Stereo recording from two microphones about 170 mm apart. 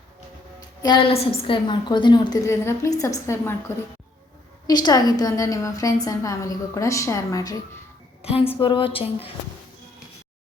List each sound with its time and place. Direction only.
0.8 s a woman's voice: 25° left (ahead or behind)
4.6 s a woman's voice: 25° left (ahead or behind)
8.2 s a woman's voice: 35° left (ahead or behind)